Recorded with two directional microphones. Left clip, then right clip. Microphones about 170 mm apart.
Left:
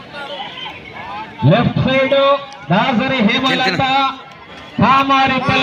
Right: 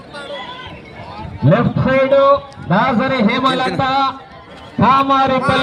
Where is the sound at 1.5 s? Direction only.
5° right (ahead or behind).